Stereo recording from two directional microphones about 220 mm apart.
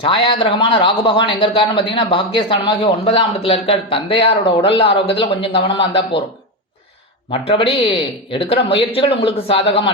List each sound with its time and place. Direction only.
0.0 s a man's voice: 25° left (ahead or behind)
7.3 s a man's voice: 25° left (ahead or behind)